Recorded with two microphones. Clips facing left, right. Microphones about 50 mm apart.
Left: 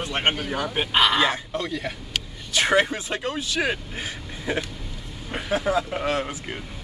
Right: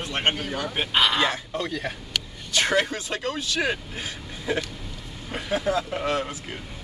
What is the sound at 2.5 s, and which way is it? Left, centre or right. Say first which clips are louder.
Speech: left 2 dB; centre.